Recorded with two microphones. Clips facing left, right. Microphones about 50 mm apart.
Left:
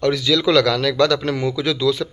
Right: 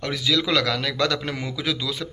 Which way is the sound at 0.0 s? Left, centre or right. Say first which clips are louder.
Left 6 dB; centre.